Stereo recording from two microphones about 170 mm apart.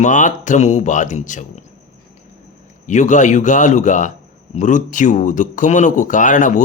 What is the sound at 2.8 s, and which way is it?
Speech, 45° left (ahead or behind).